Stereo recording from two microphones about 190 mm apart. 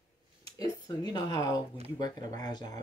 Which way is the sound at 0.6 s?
20° left (ahead or behind).